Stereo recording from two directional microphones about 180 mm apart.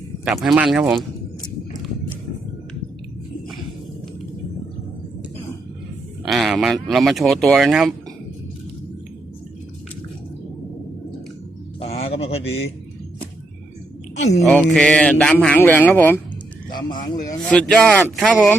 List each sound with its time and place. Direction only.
0.3 s speech: 5° right (ahead or behind)
6.2 s a sound: centre (ahead or behind)
6.8 s speech: centre (ahead or behind)
11.8 s a sound: 35° left (ahead or behind)
14.4 s a man's voice: 5° left (ahead or behind)
16.7 s speech: 25° left (ahead or behind)
17.5 s speech: 5° left (ahead or behind)